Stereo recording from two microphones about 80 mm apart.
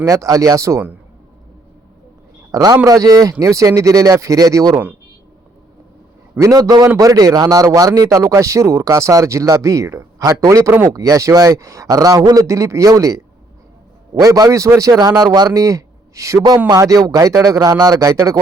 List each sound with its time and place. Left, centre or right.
0.0 s a man's voice: right
2.5 s a man's voice: right
6.4 s a man's voice: right